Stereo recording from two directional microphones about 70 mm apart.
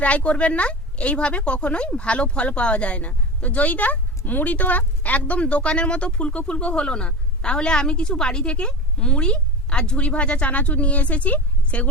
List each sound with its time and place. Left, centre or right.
0.0 s speech: centre